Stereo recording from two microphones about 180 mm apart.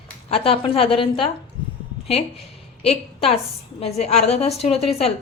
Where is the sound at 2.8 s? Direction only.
35° left (ahead or behind).